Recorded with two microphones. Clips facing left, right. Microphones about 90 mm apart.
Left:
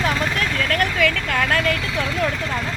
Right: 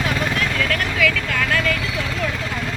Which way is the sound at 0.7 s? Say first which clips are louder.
Left 1 dB; 40° left (ahead or behind).